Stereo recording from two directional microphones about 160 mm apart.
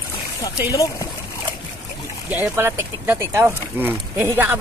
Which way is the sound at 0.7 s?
20° left (ahead or behind).